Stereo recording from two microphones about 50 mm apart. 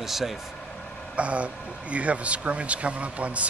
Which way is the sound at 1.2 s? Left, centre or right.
Right.